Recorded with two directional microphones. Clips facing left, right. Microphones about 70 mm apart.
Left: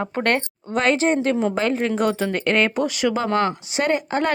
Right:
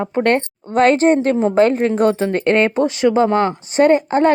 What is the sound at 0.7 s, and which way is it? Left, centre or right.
Speech, right.